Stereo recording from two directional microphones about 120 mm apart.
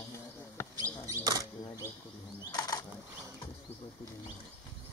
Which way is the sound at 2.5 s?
30° left (ahead or behind).